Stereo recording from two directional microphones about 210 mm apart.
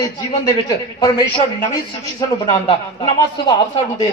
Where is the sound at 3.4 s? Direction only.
25° left (ahead or behind).